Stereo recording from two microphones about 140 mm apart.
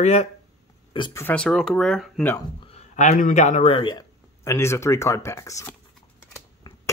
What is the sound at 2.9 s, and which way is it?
Speech, 60° left (ahead or behind).